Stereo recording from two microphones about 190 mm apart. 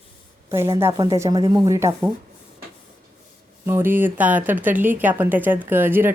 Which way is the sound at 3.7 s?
10° right (ahead or behind).